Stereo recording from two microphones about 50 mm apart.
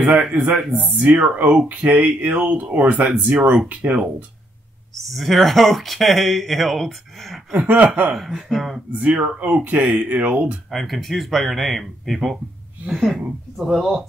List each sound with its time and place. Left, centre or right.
0.1 s speech: centre; by 4.0 s right
4.9 s speech: centre
7.5 s speech: right
8.2 s speech: centre
9.4 s speech: right
10.7 s speech: centre
12.8 s speech: centre